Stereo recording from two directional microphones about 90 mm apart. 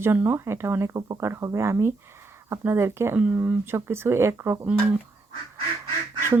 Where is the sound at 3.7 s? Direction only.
25° right (ahead or behind).